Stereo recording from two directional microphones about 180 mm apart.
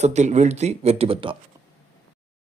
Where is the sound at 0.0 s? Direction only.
40° right (ahead or behind).